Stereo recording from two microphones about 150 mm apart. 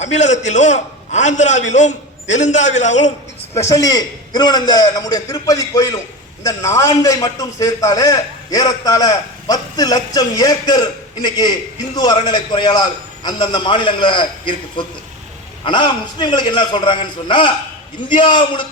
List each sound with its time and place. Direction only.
0.0 s a man's voice: 50° left (ahead or behind)
3.5 s a man's voice: 20° left (ahead or behind)